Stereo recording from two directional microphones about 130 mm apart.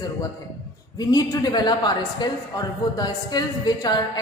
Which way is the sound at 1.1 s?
30° left (ahead or behind).